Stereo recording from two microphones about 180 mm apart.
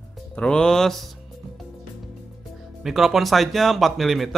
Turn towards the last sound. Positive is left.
turn(degrees=0)  # may be behind; listen again after turning